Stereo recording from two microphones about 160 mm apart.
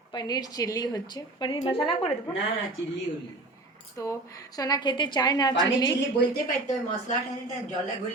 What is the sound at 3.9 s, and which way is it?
A woman's voice, 20° left (ahead or behind).